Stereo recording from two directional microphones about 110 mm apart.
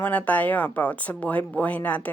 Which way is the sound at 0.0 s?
15° left (ahead or behind).